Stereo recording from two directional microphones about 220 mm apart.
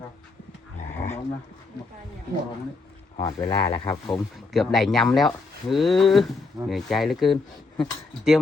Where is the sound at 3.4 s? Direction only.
15° left (ahead or behind).